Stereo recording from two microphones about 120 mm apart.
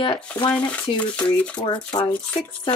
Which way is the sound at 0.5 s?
10° left (ahead or behind).